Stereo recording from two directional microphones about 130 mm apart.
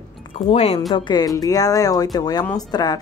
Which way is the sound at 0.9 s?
35° left (ahead or behind).